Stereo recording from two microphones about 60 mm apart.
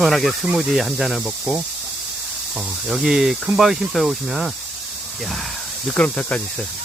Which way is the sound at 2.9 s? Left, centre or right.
Centre.